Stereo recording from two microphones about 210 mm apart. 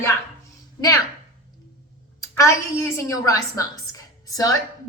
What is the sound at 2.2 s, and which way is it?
A woman's voice, 15° left (ahead or behind).